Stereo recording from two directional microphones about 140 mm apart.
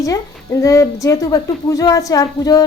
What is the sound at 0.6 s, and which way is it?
A woman's voice, 25° left (ahead or behind).